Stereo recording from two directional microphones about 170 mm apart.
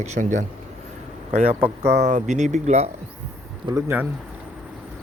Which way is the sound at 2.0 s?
45° right (ahead or behind).